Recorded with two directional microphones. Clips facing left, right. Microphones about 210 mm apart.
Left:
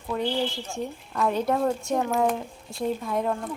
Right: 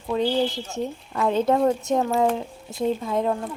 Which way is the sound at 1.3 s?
25° right (ahead or behind).